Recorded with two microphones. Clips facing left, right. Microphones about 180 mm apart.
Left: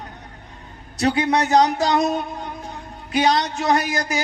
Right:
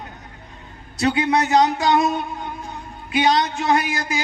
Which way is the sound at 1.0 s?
35° left (ahead or behind).